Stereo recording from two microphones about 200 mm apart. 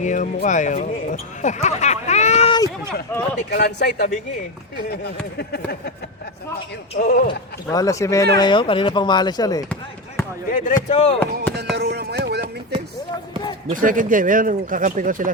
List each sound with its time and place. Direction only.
0.0 s speech: 40° left (ahead or behind)
3.1 s a man's voice: 10° left (ahead or behind)
3.5 s speech: 50° left (ahead or behind)
6.9 s speech: 50° left (ahead or behind)
7.3 s a man's voice: 20° left (ahead or behind)
10.5 s speech: 40° left (ahead or behind)
11.7 s music: 55° right (ahead or behind)
13.7 s speech: 40° right (ahead or behind)